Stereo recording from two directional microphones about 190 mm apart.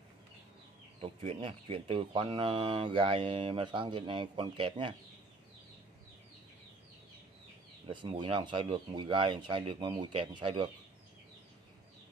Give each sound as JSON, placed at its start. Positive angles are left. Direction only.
{"t": 1.0, "sound": "speech", "side_deg": -30}
{"t": 7.9, "sound": "speech", "side_deg": -25}